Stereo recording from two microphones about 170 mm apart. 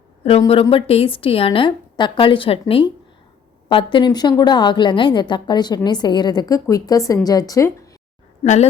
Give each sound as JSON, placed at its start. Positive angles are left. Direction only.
{"t": 0.3, "sound": "a woman's voice", "side_deg": 35}